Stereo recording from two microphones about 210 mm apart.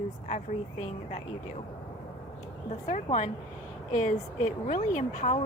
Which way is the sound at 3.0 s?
35° left (ahead or behind).